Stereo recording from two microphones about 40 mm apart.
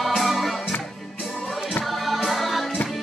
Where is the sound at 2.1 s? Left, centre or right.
Centre.